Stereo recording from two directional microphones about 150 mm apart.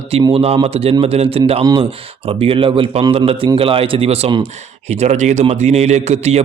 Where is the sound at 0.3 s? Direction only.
40° right (ahead or behind).